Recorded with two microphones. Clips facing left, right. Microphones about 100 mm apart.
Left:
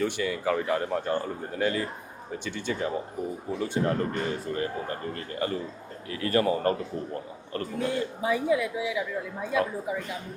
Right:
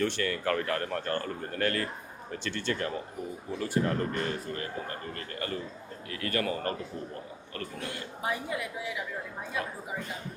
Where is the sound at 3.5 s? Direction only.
25° left (ahead or behind).